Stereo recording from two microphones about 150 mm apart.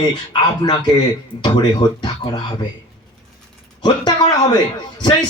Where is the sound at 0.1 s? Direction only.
30° left (ahead or behind).